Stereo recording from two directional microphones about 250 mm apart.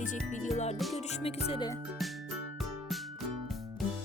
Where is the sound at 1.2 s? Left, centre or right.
Centre.